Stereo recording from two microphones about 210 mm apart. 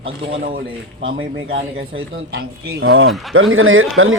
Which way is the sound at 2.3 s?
60° right (ahead or behind).